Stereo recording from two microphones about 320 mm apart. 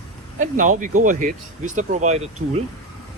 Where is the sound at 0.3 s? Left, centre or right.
Right.